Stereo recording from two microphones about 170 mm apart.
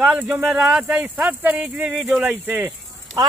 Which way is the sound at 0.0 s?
10° right (ahead or behind).